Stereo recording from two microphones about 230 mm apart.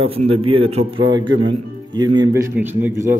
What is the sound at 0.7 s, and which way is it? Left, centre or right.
A man's voice, right.